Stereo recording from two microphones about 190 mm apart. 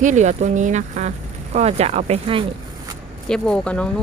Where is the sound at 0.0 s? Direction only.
40° right (ahead or behind).